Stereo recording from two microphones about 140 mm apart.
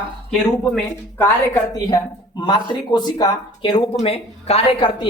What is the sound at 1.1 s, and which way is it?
Speech, 25° left (ahead or behind).